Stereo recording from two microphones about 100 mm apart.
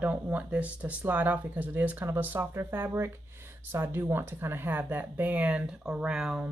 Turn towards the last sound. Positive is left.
turn(degrees=-5)  # may be behind; listen again after turning